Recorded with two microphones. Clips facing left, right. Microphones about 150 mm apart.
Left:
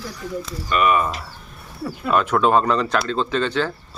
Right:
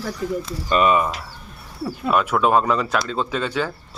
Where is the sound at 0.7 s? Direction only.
30° right (ahead or behind).